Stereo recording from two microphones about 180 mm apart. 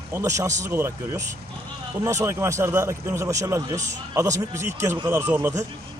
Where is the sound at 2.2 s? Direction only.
15° right (ahead or behind).